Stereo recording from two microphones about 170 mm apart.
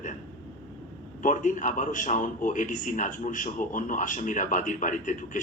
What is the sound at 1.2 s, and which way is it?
A man's voice, 50° left (ahead or behind).